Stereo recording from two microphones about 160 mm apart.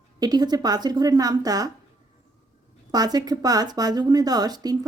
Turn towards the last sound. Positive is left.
turn(degrees=-25)  # may be behind; listen again after turning